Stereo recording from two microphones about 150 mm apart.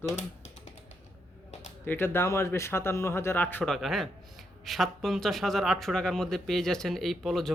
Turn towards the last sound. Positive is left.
turn(degrees=0)  # may be behind; listen again after turning